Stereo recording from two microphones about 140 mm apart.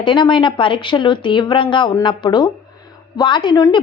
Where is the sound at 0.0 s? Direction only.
35° left (ahead or behind).